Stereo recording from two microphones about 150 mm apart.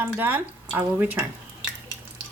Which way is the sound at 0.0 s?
10° right (ahead or behind).